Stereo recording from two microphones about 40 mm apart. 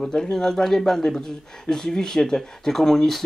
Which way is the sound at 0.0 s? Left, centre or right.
Centre.